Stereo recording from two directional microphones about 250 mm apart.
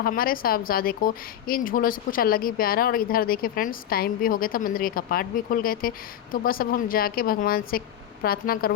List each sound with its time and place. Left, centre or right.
0.0 s a woman's voice: left